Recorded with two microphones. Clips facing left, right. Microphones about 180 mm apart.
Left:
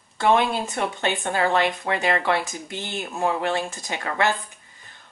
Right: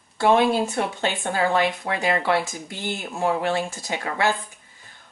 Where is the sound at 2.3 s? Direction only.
20° left (ahead or behind).